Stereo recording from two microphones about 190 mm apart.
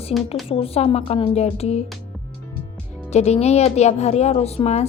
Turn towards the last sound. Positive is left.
turn(degrees=35)  # may be behind; listen again after turning